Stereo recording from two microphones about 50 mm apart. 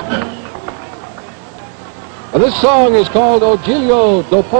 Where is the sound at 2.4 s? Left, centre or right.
Centre.